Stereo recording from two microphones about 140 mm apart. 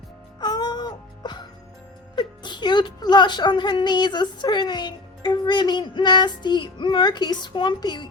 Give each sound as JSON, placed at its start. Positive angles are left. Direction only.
{"t": 0.3, "sound": "music", "side_deg": 30}
{"t": 2.1, "sound": "speech", "side_deg": 30}